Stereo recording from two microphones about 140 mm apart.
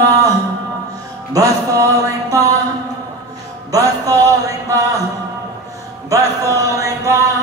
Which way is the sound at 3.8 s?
25° right (ahead or behind).